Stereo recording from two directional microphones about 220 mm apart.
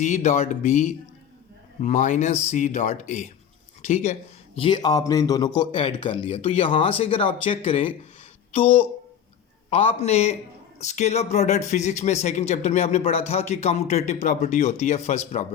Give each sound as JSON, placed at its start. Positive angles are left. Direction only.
{"t": 0.0, "sound": "a man's voice", "side_deg": 35}